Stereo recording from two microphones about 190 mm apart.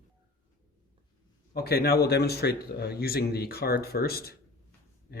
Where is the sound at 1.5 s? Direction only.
55° left (ahead or behind).